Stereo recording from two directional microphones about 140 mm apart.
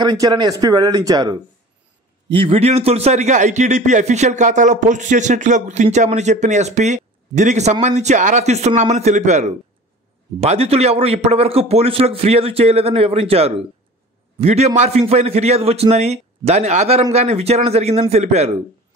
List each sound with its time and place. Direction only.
0.0 s speech: 30° right (ahead or behind)
2.3 s a man's voice: 40° right (ahead or behind)